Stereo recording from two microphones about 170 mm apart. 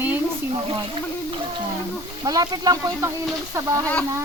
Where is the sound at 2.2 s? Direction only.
20° right (ahead or behind).